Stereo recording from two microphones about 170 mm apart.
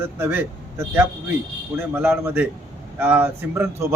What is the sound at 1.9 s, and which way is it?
A man's voice, 10° right (ahead or behind).